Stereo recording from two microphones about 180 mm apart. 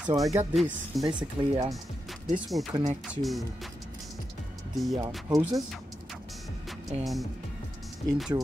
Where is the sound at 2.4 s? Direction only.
Centre (ahead or behind).